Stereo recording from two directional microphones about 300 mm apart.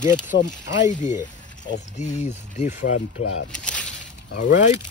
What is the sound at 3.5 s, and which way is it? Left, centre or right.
Speech, centre.